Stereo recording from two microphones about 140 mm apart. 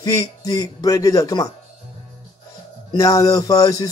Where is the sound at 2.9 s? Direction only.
25° left (ahead or behind).